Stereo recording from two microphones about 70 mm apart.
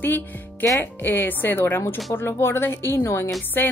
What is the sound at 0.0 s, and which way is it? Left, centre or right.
Speech, left.